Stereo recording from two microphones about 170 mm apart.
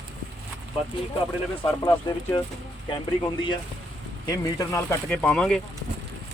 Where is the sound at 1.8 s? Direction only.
20° left (ahead or behind).